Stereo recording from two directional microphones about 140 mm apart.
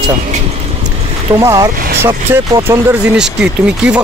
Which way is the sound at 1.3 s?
25° right (ahead or behind).